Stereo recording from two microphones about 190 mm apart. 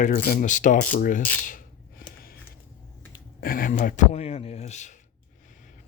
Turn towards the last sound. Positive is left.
turn(degrees=40)  # may be behind; listen again after turning